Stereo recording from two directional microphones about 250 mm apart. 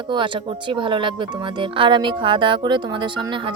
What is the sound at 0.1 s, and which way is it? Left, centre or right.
Speech, centre.